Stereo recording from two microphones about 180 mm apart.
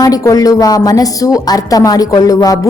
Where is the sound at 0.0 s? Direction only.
20° left (ahead or behind).